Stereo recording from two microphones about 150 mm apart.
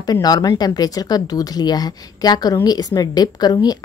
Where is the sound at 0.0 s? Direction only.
25° left (ahead or behind).